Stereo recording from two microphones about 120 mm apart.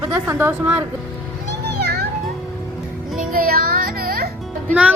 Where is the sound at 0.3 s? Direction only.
20° right (ahead or behind).